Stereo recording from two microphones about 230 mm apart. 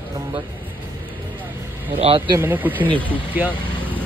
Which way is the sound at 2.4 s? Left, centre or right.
Centre.